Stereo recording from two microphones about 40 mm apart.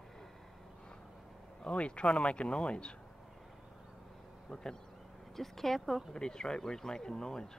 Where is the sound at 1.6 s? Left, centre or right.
Left.